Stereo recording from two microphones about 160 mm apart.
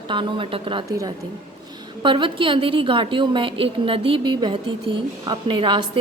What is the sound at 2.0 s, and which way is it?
A woman's voice, 30° right (ahead or behind).